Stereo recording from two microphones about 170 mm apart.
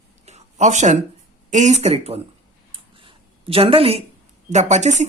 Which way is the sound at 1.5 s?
45° right (ahead or behind).